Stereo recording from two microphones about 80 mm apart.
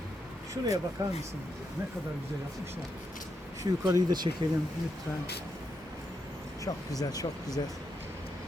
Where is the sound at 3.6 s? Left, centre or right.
Right.